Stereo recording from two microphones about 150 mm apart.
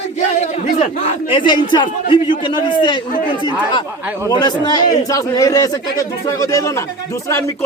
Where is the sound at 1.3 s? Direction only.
30° left (ahead or behind).